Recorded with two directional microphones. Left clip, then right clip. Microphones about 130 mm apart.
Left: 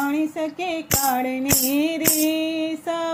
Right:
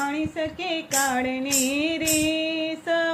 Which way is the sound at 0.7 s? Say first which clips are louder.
Left 2 dB; 50° left (ahead or behind).